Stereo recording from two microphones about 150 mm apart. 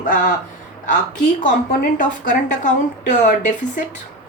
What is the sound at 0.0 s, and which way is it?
A woman's voice, 60° left (ahead or behind).